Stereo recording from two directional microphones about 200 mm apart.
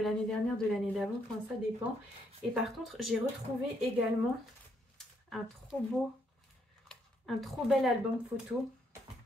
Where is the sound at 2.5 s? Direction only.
Centre (ahead or behind).